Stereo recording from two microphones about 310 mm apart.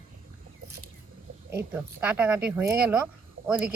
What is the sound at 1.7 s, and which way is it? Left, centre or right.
Speech, centre.